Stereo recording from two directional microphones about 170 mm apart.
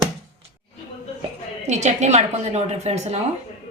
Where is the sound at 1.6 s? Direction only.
40° right (ahead or behind).